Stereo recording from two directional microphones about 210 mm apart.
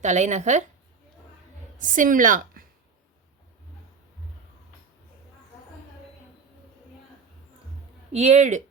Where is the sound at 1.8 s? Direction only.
40° right (ahead or behind).